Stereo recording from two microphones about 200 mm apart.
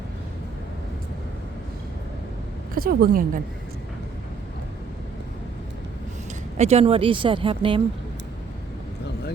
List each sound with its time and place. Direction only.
2.7 s a woman's voice: 45° right (ahead or behind)
6.6 s speech: 30° right (ahead or behind)